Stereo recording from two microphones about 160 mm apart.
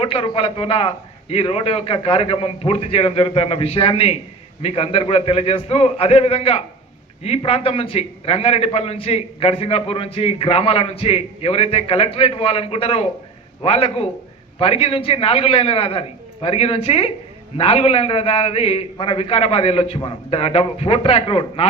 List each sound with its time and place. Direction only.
0.0 s a man's voice: 35° left (ahead or behind)